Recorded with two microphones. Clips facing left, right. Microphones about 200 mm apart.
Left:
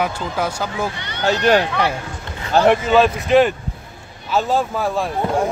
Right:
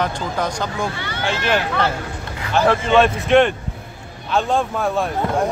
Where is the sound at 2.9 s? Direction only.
Centre (ahead or behind).